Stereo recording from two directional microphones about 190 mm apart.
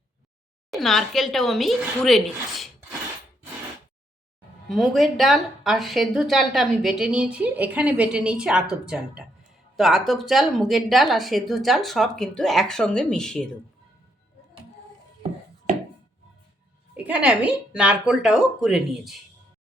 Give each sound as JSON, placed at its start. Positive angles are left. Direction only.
{"t": 0.7, "sound": "speech", "side_deg": 0}
{"t": 4.7, "sound": "speech", "side_deg": 0}
{"t": 17.0, "sound": "speech", "side_deg": -5}